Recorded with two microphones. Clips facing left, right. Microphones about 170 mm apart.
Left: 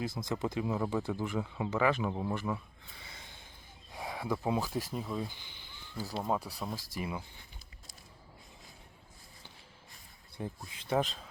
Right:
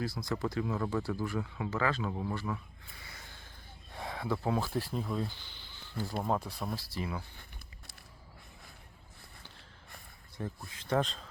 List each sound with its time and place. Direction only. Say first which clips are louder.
0.0 s speech: even; 20° left (ahead or behind)
3.1 s snort: right 1 dB; 20° left (ahead or behind)
3.9 s speech: even; 10° left (ahead or behind)
5.8 s a sound: right 2 dB; 10° left (ahead or behind)
6.2 s speech: even; 5° left (ahead or behind)
6.9 s speech: even; 15° left (ahead or behind)
10.3 s speech: even; 15° left (ahead or behind)